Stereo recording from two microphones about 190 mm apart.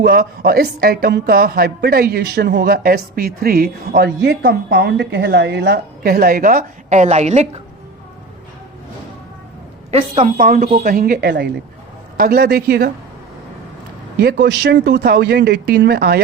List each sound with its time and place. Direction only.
0.0 s a woman's voice: 55° right (ahead or behind); by 7.6 s 35° right (ahead or behind)
9.9 s a woman's voice: 40° right (ahead or behind); by 12.9 s 60° right (ahead or behind)
14.2 s speech: 55° right (ahead or behind)